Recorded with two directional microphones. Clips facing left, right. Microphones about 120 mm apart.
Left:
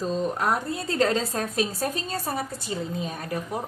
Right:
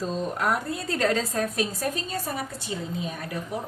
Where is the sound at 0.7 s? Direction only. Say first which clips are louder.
Left 1 dB; 25° left (ahead or behind).